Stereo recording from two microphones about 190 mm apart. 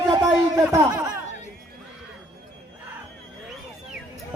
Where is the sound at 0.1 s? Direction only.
15° right (ahead or behind).